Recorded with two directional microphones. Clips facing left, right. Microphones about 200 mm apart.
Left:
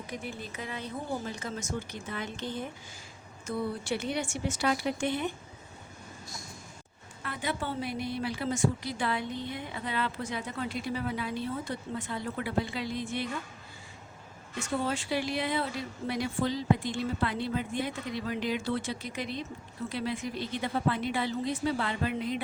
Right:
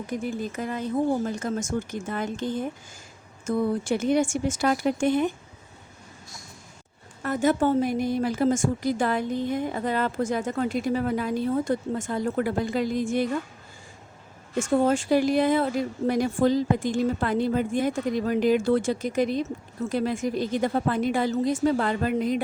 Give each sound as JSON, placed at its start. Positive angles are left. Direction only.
{"t": 0.1, "sound": "speech", "side_deg": -45}
{"t": 7.2, "sound": "speech", "side_deg": -45}
{"t": 14.5, "sound": "speech", "side_deg": -45}